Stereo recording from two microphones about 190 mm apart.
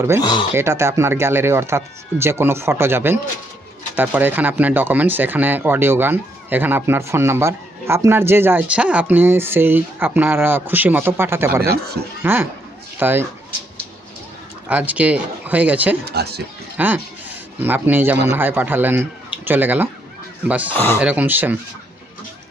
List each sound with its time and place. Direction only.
0.2 s speech: 20° left (ahead or behind)
0.5 s speech: 15° right (ahead or behind)
11.6 s speech: 55° right (ahead or behind)
12.2 s speech: 10° right (ahead or behind)
14.7 s speech: 5° right (ahead or behind)
16.0 s speech: 60° right (ahead or behind)
16.7 s speech: 10° right (ahead or behind)
20.7 s speech: 10° left (ahead or behind)
21.0 s speech: 10° right (ahead or behind)